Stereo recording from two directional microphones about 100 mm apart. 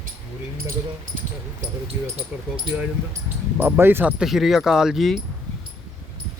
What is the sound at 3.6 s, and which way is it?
Speech, 20° right (ahead or behind).